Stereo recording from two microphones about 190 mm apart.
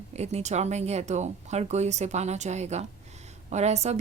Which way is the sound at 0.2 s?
35° right (ahead or behind).